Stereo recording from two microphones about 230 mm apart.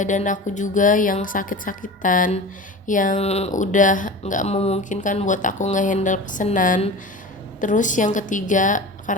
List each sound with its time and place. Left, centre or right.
0.0 s speech: left